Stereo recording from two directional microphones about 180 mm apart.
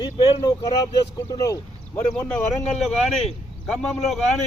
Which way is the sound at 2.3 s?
5° left (ahead or behind).